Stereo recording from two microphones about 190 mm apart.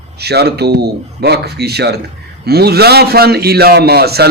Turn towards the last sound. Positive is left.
turn(degrees=-55)  # may be behind; listen again after turning